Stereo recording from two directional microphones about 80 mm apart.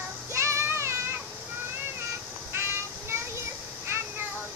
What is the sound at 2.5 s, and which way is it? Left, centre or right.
Child singing, right.